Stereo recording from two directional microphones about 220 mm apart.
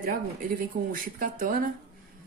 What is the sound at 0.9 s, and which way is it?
Speech, 40° right (ahead or behind).